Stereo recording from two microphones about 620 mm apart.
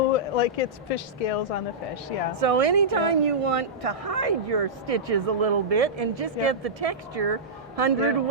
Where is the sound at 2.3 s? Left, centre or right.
Right.